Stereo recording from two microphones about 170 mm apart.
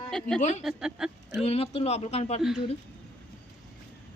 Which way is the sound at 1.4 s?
35° left (ahead or behind).